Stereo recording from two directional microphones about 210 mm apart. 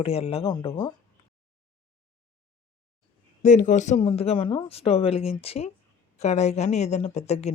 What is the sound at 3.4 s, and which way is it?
Speech, 35° left (ahead or behind).